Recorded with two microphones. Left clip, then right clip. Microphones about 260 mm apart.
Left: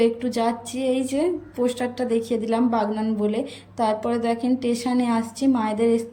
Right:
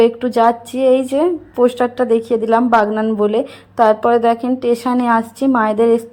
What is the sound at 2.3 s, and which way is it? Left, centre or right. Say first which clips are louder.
Speech: right 10 dB; right.